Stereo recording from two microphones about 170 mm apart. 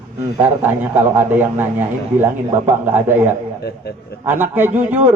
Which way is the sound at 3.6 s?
70° left (ahead or behind).